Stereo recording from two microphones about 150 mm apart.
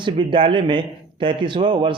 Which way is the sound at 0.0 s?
35° right (ahead or behind).